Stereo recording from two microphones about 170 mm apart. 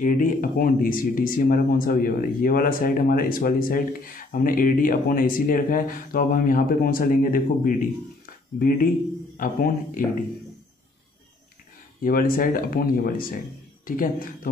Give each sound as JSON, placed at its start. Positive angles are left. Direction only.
{"t": 0.0, "sound": "speech", "side_deg": 55}
{"t": 9.4, "sound": "a man's voice", "side_deg": 55}
{"t": 12.0, "sound": "speech", "side_deg": 55}